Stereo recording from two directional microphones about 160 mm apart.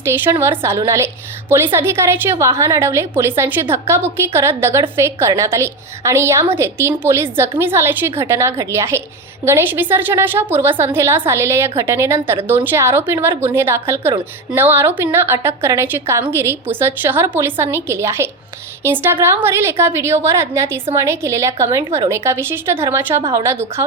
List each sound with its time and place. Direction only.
0.0 s a woman's voice: 15° right (ahead or behind)